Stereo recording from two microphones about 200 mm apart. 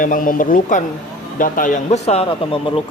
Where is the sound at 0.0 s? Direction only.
40° left (ahead or behind).